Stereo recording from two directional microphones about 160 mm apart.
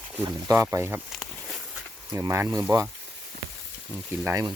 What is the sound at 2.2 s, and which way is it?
Speech, 20° right (ahead or behind).